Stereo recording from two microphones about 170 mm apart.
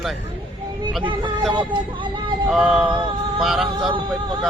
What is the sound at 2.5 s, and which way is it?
Speech, 5° right (ahead or behind).